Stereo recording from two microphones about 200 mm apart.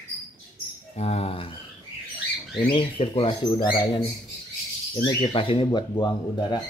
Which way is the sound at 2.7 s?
25° left (ahead or behind).